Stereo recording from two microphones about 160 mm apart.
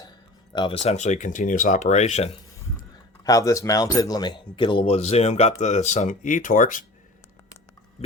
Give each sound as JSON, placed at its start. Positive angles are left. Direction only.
{"t": 0.5, "sound": "speech", "side_deg": 35}
{"t": 3.2, "sound": "speech", "side_deg": 20}